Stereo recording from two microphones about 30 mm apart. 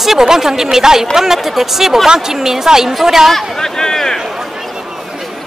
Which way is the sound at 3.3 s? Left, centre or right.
Centre.